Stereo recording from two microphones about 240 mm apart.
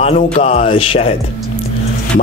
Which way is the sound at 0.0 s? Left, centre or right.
Left.